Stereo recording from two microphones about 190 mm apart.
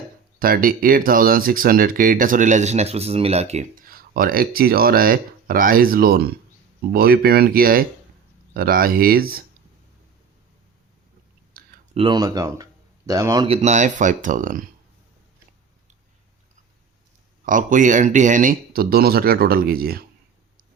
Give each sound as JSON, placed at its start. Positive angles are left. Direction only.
{"t": 0.3, "sound": "speech", "side_deg": -50}
{"t": 11.9, "sound": "speech", "side_deg": -25}
{"t": 13.5, "sound": "speech", "side_deg": -35}
{"t": 17.4, "sound": "speech", "side_deg": -45}